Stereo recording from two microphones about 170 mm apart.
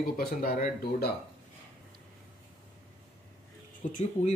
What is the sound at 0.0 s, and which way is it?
Speech, 60° left (ahead or behind).